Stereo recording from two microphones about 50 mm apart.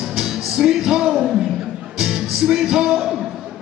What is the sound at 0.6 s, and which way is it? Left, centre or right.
Music, centre.